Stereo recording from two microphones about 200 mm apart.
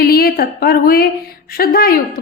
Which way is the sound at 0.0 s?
50° left (ahead or behind).